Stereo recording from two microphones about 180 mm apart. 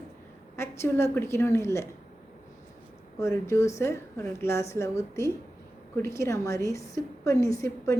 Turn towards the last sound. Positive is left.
turn(degrees=15)  # may be behind; listen again after turning